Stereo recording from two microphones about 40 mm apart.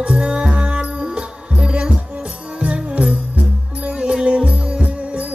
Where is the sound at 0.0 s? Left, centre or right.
Right.